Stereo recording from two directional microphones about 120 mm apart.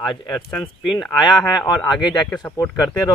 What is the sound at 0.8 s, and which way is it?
Speech, 40° left (ahead or behind).